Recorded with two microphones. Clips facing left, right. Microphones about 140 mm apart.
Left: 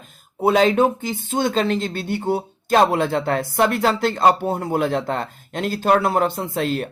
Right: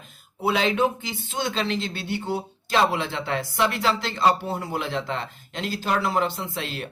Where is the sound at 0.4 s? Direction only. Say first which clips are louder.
Left 6 dB; 45° left (ahead or behind).